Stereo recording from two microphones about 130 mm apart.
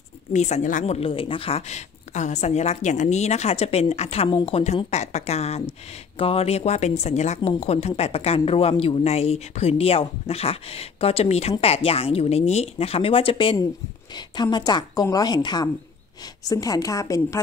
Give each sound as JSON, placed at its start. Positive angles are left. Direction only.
{"t": 0.3, "sound": "a woman's voice", "side_deg": 65}
{"t": 0.9, "sound": "a woman's voice", "side_deg": 45}